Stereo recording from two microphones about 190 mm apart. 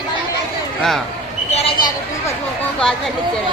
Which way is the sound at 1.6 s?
30° left (ahead or behind).